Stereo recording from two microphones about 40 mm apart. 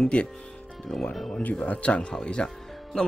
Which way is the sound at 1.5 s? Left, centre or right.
Left.